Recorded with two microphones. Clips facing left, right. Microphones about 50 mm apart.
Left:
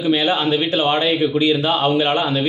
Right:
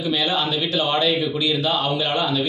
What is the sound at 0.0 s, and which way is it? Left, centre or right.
A man's voice, left.